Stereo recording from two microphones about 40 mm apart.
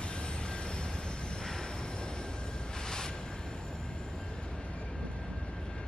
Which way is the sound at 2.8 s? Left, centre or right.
Centre.